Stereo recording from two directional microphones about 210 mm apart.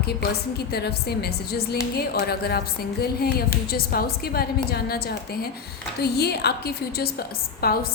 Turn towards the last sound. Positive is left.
turn(degrees=45)  # may be behind; listen again after turning